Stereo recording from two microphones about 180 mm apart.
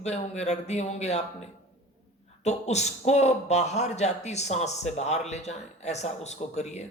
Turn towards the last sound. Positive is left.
turn(degrees=40)  # may be behind; listen again after turning